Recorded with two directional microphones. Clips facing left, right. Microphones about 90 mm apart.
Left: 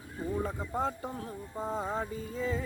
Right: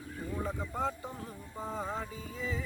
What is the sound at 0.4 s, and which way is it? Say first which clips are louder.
Music: left 2 dB; 35° left (ahead or behind).